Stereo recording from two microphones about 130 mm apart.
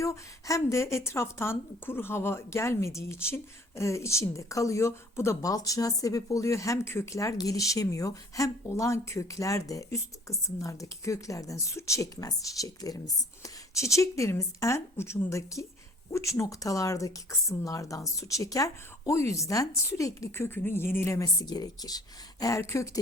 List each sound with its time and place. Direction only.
0.0 s a woman's voice: 25° left (ahead or behind)